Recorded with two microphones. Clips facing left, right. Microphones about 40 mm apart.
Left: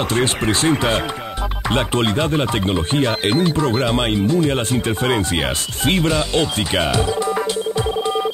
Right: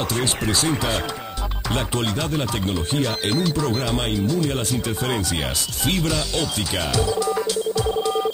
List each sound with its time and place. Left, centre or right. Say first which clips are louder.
0.1 s speech: left 5 dB; left